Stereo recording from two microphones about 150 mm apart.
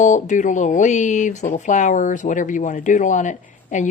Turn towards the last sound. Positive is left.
turn(degrees=55)  # may be behind; listen again after turning